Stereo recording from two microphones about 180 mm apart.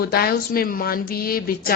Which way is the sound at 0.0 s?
60° left (ahead or behind).